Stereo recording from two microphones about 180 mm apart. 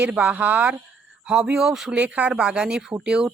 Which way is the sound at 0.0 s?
10° right (ahead or behind).